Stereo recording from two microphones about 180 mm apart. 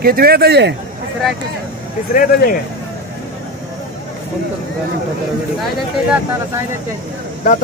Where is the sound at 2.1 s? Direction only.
50° left (ahead or behind).